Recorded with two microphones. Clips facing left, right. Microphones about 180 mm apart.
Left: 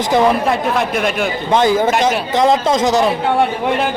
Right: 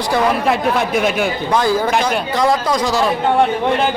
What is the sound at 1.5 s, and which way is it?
A man's voice, 20° left (ahead or behind).